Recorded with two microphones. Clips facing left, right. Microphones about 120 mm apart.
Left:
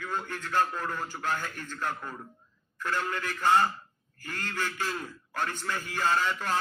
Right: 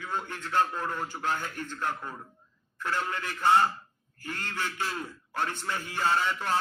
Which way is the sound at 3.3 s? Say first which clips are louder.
Right 1 dB; 15° right (ahead or behind).